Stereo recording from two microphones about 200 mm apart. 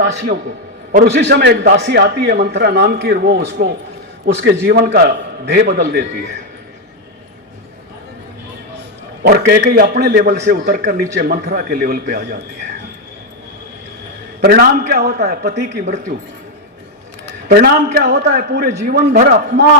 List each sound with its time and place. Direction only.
0.9 s a man's voice: 50° right (ahead or behind)
9.2 s a man's voice: 50° right (ahead or behind)
14.4 s a man's voice: 50° right (ahead or behind)
17.5 s a man's voice: 45° right (ahead or behind)